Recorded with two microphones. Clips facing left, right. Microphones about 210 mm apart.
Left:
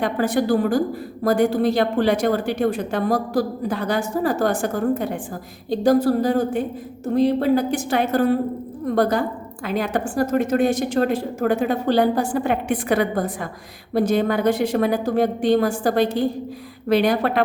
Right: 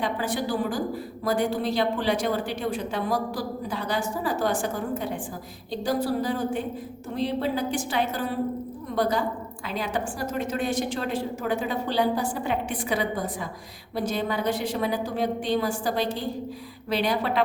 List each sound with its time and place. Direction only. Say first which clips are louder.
0.0 s speech: left 7 dB; 50° left (ahead or behind)
5.8 s a woman's voice: left 9 dB; 45° left (ahead or behind)